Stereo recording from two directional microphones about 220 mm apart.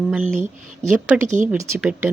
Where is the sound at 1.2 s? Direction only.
35° right (ahead or behind).